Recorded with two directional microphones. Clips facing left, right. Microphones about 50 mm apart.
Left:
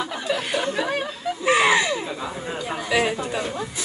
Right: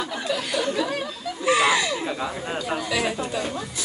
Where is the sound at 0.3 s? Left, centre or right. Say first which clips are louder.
Left 1 dB; left.